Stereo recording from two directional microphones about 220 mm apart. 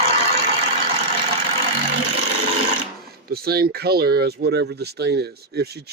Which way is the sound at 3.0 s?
45° right (ahead or behind).